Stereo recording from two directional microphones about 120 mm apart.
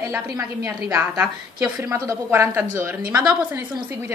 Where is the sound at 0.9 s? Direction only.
20° right (ahead or behind).